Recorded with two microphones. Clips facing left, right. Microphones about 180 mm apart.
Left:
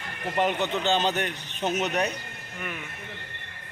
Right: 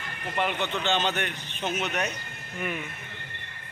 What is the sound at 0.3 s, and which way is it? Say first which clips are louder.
Speech: left 3 dB; 40° left (ahead or behind).